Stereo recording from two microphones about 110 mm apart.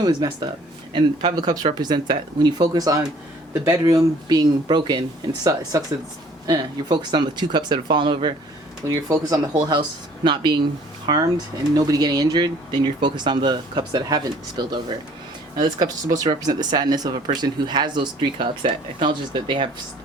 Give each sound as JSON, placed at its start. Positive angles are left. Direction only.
{"t": 0.0, "sound": "speech", "side_deg": -40}
{"t": 8.8, "sound": "speech", "side_deg": -30}